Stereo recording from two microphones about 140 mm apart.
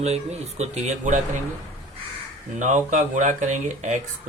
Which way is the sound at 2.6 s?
60° right (ahead or behind).